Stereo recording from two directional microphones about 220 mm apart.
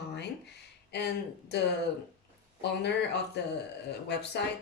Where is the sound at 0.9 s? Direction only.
50° left (ahead or behind).